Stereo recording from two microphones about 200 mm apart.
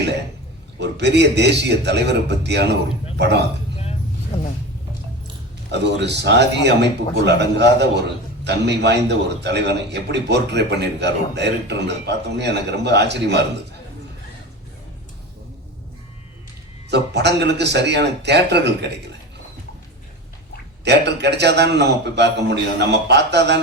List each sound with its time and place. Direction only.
0.8 s a man's voice: 60° right (ahead or behind)
3.8 s a sound: 30° left (ahead or behind)
5.7 s a man's voice: 60° right (ahead or behind)
16.9 s a man's voice: 60° right (ahead or behind)
20.8 s a man's voice: 60° right (ahead or behind)